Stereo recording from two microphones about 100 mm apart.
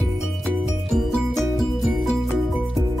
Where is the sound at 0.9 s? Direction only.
Centre (ahead or behind).